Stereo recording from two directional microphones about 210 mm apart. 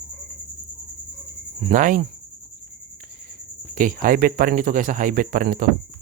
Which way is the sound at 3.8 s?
40° right (ahead or behind).